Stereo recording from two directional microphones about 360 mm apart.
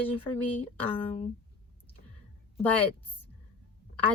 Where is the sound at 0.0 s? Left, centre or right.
Centre.